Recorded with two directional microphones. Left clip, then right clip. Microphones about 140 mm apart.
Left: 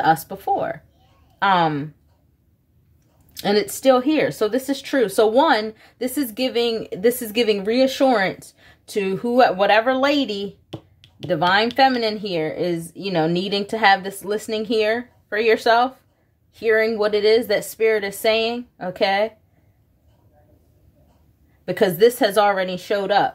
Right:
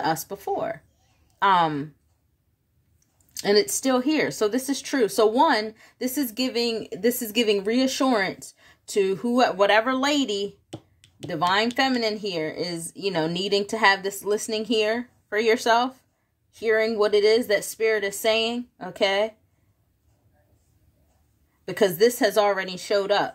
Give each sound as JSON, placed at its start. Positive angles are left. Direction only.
{"t": 0.0, "sound": "speech", "side_deg": -20}
{"t": 3.3, "sound": "speech", "side_deg": -20}
{"t": 21.6, "sound": "speech", "side_deg": -25}